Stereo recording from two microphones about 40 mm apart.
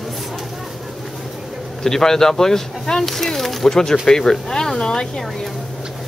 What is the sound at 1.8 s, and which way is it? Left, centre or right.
Speech, centre.